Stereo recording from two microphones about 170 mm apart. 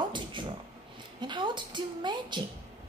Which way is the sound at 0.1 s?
30° right (ahead or behind).